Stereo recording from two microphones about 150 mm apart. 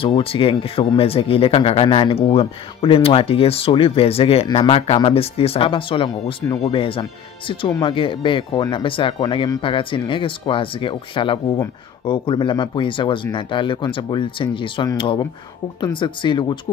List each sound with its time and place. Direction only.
0.0 s speech: 40° left (ahead or behind)